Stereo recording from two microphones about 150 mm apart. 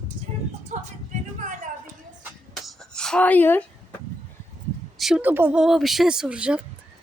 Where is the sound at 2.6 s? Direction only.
5° left (ahead or behind).